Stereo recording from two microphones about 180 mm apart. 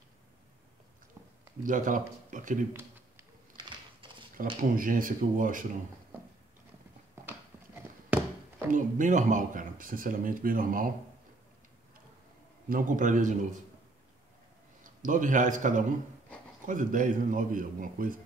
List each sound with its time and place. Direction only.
1.6 s speech: 45° right (ahead or behind)
2.7 s a sound: 15° right (ahead or behind)
4.4 s speech: 50° right (ahead or behind)
8.6 s speech: 45° right (ahead or behind)
12.6 s speech: 50° right (ahead or behind)
14.8 s a man's voice: 45° right (ahead or behind)